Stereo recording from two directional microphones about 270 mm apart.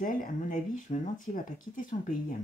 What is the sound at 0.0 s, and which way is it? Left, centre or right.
Speech, left.